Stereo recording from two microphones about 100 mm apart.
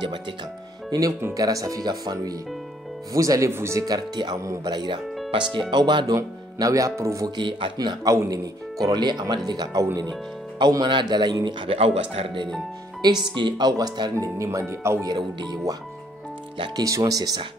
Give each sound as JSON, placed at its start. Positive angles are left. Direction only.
{"t": 0.8, "sound": "speech", "side_deg": -40}
{"t": 4.7, "sound": "a man's voice", "side_deg": -50}
{"t": 6.1, "sound": "speech", "side_deg": -35}
{"t": 7.2, "sound": "a man's voice", "side_deg": -50}
{"t": 11.6, "sound": "speech", "side_deg": -70}
{"t": 13.3, "sound": "a man's voice", "side_deg": -50}
{"t": 14.1, "sound": "speech", "side_deg": -30}
{"t": 15.0, "sound": "a man's voice", "side_deg": -45}
{"t": 16.7, "sound": "speech", "side_deg": -35}